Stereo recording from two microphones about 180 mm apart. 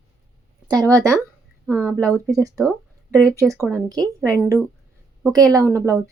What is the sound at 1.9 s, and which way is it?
Speech, 5° left (ahead or behind).